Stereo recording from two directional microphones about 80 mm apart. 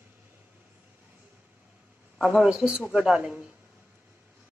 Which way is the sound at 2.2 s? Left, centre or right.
Centre.